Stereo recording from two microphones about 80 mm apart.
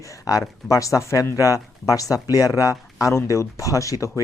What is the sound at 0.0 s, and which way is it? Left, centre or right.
Speech, left.